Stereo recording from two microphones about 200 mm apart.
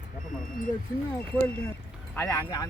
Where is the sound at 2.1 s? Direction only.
10° left (ahead or behind).